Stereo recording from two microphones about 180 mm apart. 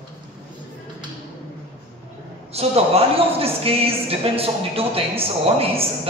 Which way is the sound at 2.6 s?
35° right (ahead or behind).